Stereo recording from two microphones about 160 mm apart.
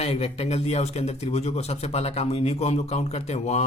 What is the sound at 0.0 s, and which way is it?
A man's voice, 40° left (ahead or behind).